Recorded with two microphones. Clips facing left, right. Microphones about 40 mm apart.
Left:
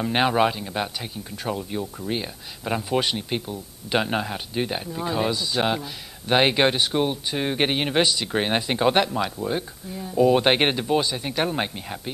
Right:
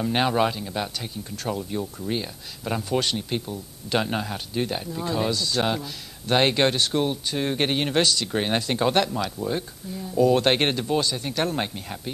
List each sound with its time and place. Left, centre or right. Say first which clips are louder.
0.0 s speech: left 2 dB; centre